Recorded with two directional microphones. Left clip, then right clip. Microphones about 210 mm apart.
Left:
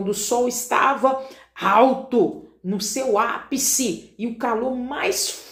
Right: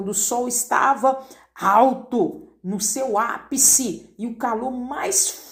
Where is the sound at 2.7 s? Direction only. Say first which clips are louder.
Left 1 dB; 30° right (ahead or behind).